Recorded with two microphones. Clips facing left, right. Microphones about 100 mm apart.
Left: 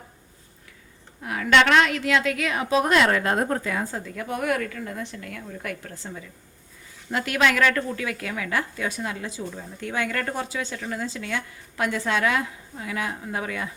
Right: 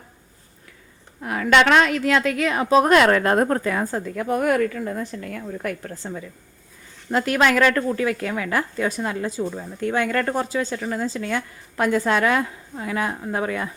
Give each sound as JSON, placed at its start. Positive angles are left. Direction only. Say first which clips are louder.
{"t": 1.2, "sound": "speech", "louder": "right 2 dB", "side_deg": -45}
{"t": 2.9, "sound": "speech", "louder": "right 5 dB", "side_deg": -50}
{"t": 7.1, "sound": "a woman's voice", "louder": "right 4 dB", "side_deg": -40}